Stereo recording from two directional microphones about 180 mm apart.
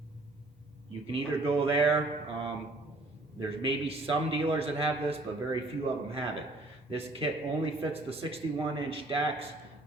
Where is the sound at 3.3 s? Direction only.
30° right (ahead or behind).